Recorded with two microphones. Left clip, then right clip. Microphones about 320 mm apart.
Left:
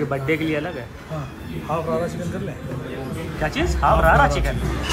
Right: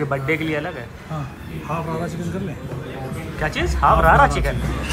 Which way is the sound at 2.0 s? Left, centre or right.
Centre.